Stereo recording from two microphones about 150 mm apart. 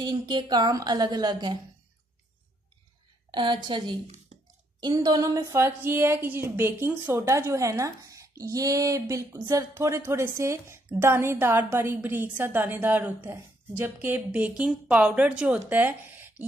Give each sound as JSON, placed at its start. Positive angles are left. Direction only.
{"t": 0.0, "sound": "a woman's voice", "side_deg": -30}
{"t": 3.3, "sound": "a woman's voice", "side_deg": -35}